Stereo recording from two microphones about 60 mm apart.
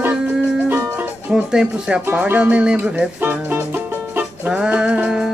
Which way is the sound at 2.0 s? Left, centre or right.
Right.